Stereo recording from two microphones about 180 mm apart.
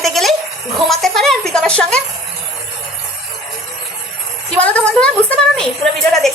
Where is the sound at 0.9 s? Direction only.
Centre (ahead or behind).